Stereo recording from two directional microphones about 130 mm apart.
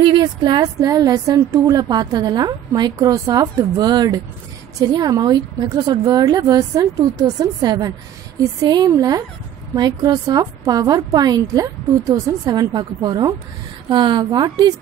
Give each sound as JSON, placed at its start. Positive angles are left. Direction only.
{"t": 0.0, "sound": "a woman's voice", "side_deg": -40}